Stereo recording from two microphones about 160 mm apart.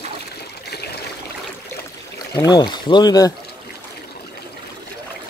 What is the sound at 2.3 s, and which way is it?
Speech, 25° left (ahead or behind).